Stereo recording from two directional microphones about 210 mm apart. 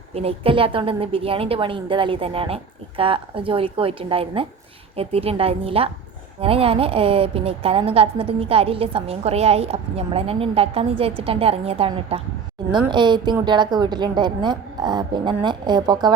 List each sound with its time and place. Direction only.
0.1 s a woman's voice: 30° right (ahead or behind)